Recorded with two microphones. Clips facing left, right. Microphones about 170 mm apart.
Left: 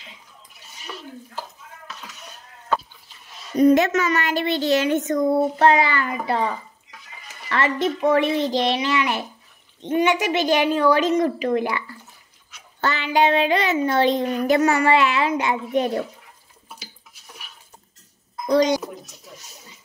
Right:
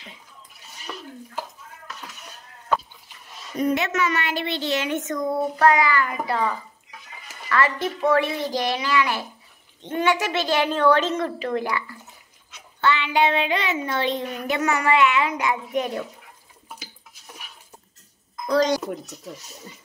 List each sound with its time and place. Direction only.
3.5 s a child's voice: 40° left (ahead or behind); by 11.8 s 20° left (ahead or behind)
12.8 s speech: 40° left (ahead or behind)